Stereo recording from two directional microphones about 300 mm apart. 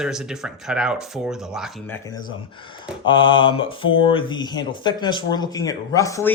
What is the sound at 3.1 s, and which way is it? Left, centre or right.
Speech, centre.